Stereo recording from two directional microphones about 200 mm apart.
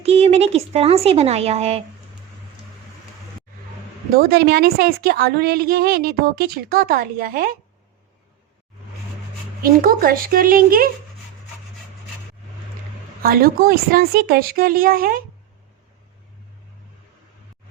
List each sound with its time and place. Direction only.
0.0 s speech: 30° right (ahead or behind)
4.1 s a woman's voice: 50° right (ahead or behind)
9.8 s a woman's voice: 45° right (ahead or behind)
13.2 s a woman's voice: 45° right (ahead or behind)